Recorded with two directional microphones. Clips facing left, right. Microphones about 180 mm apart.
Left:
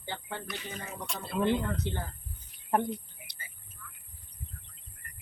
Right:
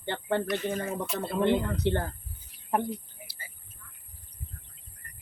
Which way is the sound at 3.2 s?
35° right (ahead or behind).